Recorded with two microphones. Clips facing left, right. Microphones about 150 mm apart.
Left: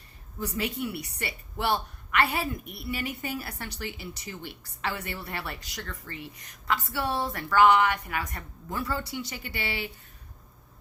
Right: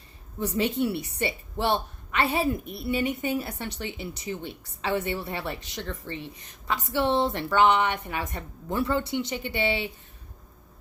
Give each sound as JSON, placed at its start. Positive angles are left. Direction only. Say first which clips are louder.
{"t": 0.3, "sound": "a woman's voice", "louder": "right 6 dB", "side_deg": -25}